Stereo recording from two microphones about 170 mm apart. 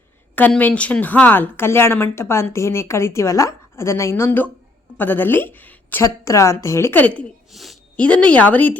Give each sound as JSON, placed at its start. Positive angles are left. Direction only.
{"t": 0.3, "sound": "speech", "side_deg": 10}
{"t": 7.2, "sound": "speech", "side_deg": 0}